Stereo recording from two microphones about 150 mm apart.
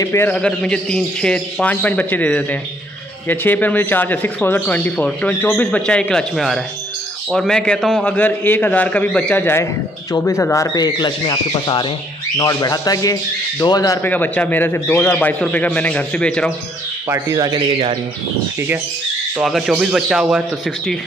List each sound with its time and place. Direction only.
0.0 s speech: 15° left (ahead or behind)
14.0 s speech: 10° left (ahead or behind)
17.1 s speech: 25° right (ahead or behind)
19.4 s a man's voice: centre (ahead or behind)